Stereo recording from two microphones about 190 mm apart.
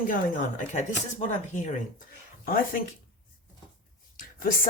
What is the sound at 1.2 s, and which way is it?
Speech, 40° left (ahead or behind).